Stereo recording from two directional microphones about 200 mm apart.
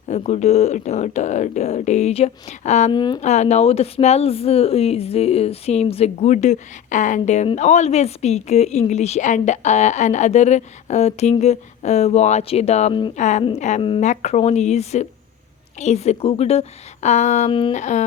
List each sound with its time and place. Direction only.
0.1 s speech: 35° left (ahead or behind)
2.9 s speech: 20° left (ahead or behind)
3.2 s speech: 35° left (ahead or behind)
13.1 s speech: 35° left (ahead or behind)
17.5 s speech: 25° left (ahead or behind)
17.7 s speech: 35° left (ahead or behind)